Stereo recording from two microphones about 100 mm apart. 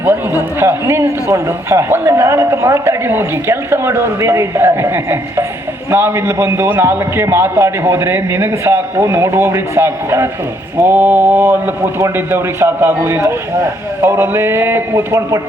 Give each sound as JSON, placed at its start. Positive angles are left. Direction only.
{"t": 0.0, "sound": "a man's voice", "side_deg": -20}